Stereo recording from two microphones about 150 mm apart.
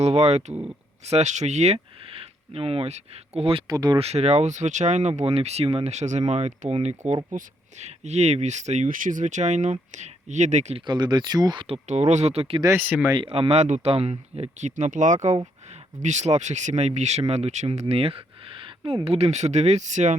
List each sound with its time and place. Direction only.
0.0 s speech: 45° right (ahead or behind)
3.7 s speech: 30° right (ahead or behind)
4.0 s speech: 45° right (ahead or behind)
10.8 s speech: 30° right (ahead or behind)
11.9 s speech: 50° right (ahead or behind)
12.6 s speech: 10° right (ahead or behind)
13.1 s speech: 35° right (ahead or behind); by 20.1 s 50° right (ahead or behind)